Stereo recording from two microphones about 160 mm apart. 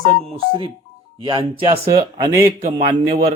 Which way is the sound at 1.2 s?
35° right (ahead or behind).